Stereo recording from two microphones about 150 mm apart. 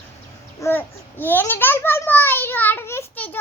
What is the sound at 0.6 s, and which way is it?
A child's voice, 15° left (ahead or behind).